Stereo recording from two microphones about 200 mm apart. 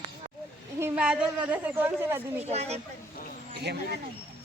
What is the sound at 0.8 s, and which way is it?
A woman's voice, 5° right (ahead or behind).